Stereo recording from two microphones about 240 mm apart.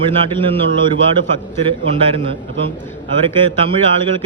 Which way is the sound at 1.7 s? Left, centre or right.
Right.